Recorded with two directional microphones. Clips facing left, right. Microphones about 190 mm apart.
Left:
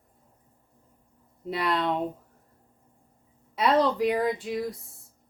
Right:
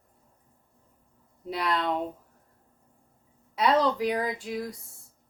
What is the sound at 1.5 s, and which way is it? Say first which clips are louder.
Speech: left 1 dB; centre (ahead or behind).